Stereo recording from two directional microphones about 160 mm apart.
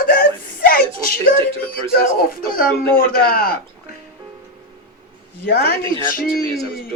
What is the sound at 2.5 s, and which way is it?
A man's voice, 65° left (ahead or behind).